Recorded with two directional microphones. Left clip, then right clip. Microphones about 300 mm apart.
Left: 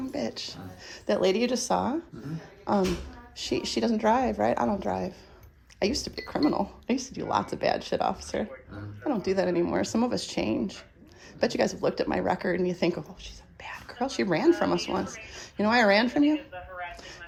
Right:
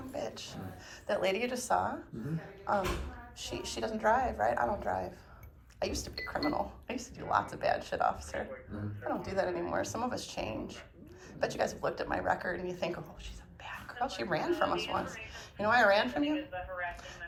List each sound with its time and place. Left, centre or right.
0.1 s speech: left